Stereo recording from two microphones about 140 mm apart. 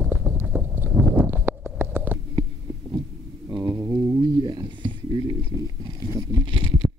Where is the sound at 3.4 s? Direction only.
30° right (ahead or behind).